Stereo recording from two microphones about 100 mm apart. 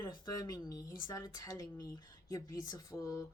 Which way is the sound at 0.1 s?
40° left (ahead or behind).